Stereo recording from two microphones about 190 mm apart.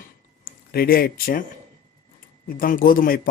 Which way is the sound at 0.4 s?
50° left (ahead or behind).